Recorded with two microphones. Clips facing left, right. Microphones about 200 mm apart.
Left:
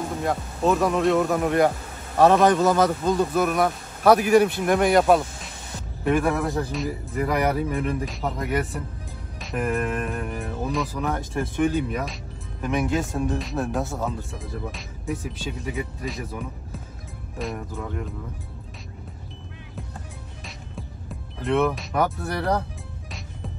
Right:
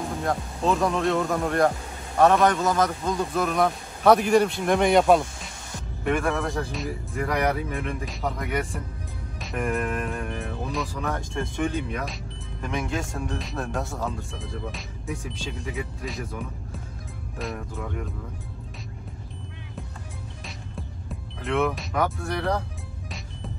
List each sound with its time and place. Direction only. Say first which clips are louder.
0.2 s speech: left 3 dB; 5° left (ahead or behind)
2.4 s a man's voice: left 3 dB; 30° left (ahead or behind)
3.1 s speech: left 4 dB; 5° left (ahead or behind)
20.4 s music: left 1 dB; centre (ahead or behind)